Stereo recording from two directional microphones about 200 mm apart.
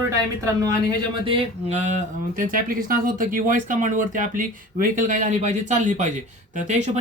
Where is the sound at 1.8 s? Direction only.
35° right (ahead or behind).